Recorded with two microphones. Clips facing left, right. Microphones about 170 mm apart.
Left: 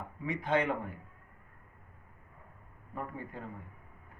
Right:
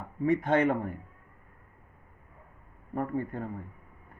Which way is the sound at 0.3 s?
45° right (ahead or behind).